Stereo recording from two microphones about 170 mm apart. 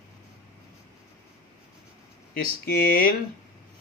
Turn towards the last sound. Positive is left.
turn(degrees=60)  # may be behind; listen again after turning